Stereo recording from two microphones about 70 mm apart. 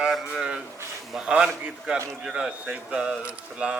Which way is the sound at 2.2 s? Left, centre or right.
Centre.